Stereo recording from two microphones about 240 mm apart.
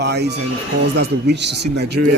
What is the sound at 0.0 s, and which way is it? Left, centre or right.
Speech, right.